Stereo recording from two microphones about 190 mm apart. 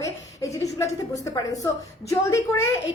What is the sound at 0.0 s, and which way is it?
A woman's voice, 15° left (ahead or behind).